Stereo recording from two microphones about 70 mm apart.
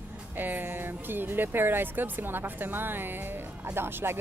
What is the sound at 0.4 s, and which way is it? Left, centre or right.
Speech, right.